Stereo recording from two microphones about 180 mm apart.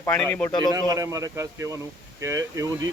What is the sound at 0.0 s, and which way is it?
Speech, 10° left (ahead or behind).